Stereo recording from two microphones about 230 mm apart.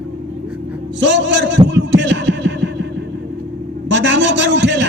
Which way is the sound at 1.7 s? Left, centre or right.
Right.